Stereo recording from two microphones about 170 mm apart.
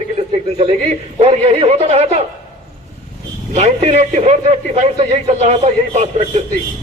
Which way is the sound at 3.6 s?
40° right (ahead or behind).